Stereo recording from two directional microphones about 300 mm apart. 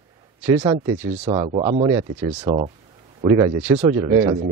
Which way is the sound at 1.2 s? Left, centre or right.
Right.